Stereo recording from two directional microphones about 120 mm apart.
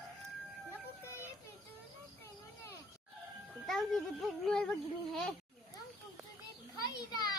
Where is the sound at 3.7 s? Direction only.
Centre (ahead or behind).